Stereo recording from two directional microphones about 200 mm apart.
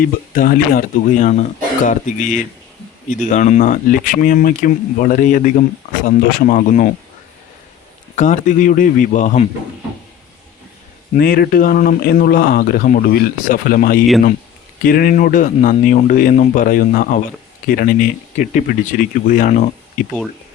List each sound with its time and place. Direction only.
0.0 s speech: 45° left (ahead or behind)
8.1 s speech: 40° left (ahead or behind)
11.2 s speech: 50° left (ahead or behind)